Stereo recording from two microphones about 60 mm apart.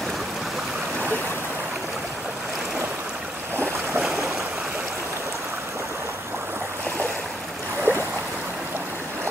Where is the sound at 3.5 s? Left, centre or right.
Right.